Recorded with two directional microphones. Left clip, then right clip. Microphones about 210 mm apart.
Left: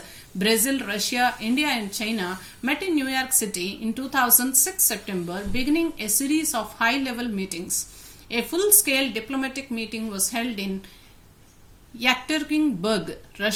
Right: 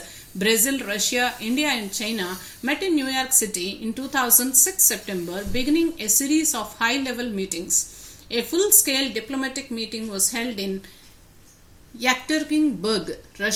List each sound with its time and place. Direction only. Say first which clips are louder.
0.3 s a woman's voice: right 1 dB; 35° left (ahead or behind)
11.9 s a woman's voice: right 1 dB; 35° left (ahead or behind)